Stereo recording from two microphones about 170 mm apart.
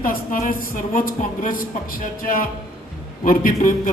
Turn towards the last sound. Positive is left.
turn(degrees=55)  # may be behind; listen again after turning